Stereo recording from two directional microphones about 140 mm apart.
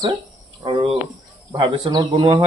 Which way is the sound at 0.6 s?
30° right (ahead or behind).